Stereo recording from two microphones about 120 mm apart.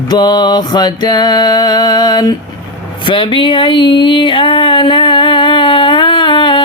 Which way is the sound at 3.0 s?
45° left (ahead or behind).